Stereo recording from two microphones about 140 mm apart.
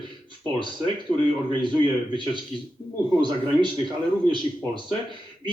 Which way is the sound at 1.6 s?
35° right (ahead or behind).